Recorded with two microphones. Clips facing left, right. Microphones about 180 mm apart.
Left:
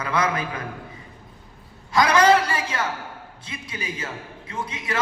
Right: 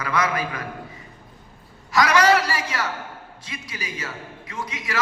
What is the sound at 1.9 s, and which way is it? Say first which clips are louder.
A man's voice: left 1 dB; 25° left (ahead or behind).